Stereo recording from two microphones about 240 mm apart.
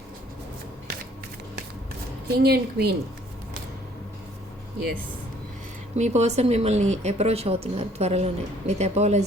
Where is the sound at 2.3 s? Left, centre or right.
Right.